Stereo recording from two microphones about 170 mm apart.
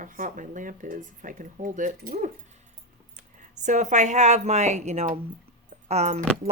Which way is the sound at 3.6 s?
45° right (ahead or behind).